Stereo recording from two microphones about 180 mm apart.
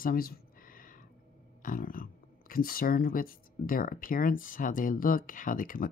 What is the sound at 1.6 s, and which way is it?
Speech, 50° left (ahead or behind).